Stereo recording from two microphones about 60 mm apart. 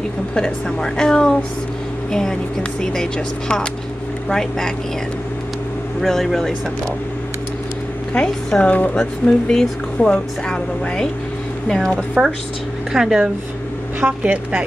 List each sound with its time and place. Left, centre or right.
0.3 s a woman's voice: centre
5.9 s speech: centre
8.1 s a woman's voice: centre
9.5 s a woman's voice: centre
11.6 s speech: centre
12.2 s speech: centre
14.0 s speech: right